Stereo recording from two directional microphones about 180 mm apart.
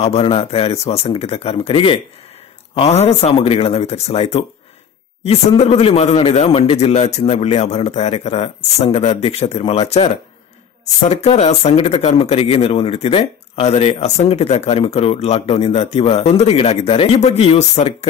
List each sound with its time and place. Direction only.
0.0 s speech: 35° left (ahead or behind)